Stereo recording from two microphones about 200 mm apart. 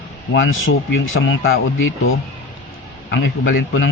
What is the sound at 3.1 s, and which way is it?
Speech, 70° left (ahead or behind).